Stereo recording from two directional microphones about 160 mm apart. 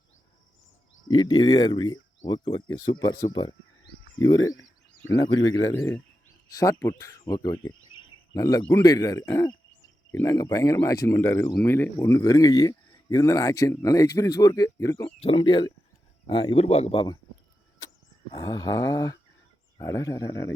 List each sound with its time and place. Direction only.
1.0 s speech: 25° left (ahead or behind)
15.2 s speech: 35° left (ahead or behind)
18.4 s speech: 20° left (ahead or behind)